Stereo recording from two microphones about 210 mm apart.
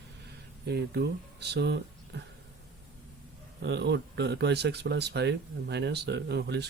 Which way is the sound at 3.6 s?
55° right (ahead or behind).